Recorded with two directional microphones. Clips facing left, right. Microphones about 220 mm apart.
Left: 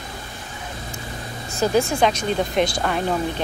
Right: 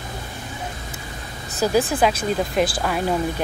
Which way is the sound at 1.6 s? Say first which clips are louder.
Even; 5° right (ahead or behind).